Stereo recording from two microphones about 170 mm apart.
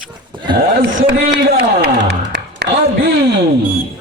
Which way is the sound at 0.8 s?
70° right (ahead or behind).